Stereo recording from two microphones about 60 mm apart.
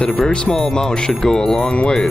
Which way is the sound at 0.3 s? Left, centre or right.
Centre.